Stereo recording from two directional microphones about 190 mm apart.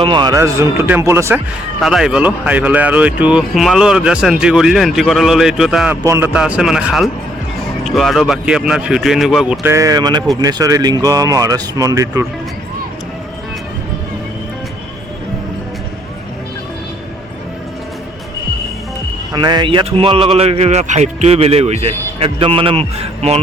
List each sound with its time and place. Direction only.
0.0 s a man's voice: 25° right (ahead or behind)
1.8 s a man's voice: centre (ahead or behind)
9.6 s speech: 15° right (ahead or behind)
19.3 s a man's voice: 20° right (ahead or behind)